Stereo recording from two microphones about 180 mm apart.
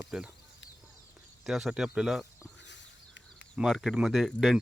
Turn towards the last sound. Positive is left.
turn(degrees=0)  # may be behind; listen again after turning